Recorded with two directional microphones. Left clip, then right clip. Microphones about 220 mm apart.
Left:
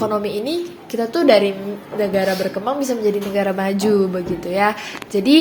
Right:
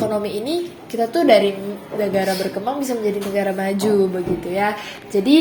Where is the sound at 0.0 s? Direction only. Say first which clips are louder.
Left 1 dB; 35° left (ahead or behind).